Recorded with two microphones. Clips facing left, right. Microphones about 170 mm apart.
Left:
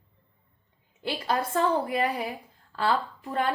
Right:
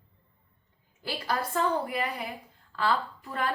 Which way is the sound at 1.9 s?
30° left (ahead or behind).